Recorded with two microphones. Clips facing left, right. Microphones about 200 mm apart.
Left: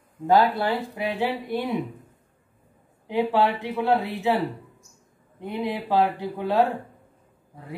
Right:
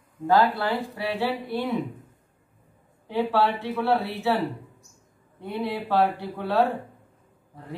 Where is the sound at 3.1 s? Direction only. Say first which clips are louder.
Left 1 dB; 15° left (ahead or behind).